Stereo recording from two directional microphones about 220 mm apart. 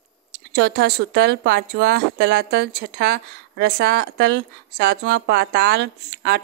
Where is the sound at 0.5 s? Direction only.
45° right (ahead or behind).